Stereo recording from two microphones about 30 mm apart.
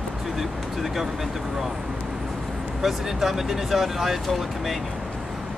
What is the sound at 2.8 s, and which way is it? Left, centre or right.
Speech, centre.